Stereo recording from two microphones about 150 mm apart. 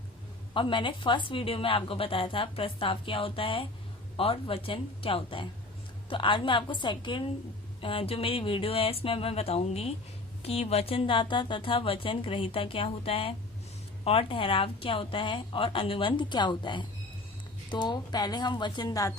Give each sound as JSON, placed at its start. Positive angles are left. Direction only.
{"t": 0.5, "sound": "a woman's voice", "side_deg": 35}